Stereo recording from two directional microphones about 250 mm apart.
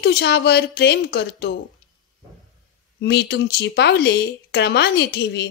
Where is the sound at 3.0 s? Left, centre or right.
Left.